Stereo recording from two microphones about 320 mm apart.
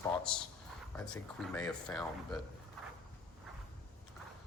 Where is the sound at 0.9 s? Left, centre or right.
Centre.